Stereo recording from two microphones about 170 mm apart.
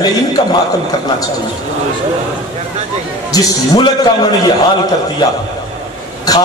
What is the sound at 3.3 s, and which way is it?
A man's voice, 20° left (ahead or behind).